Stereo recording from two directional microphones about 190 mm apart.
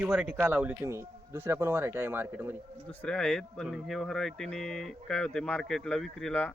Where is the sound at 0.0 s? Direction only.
5° right (ahead or behind).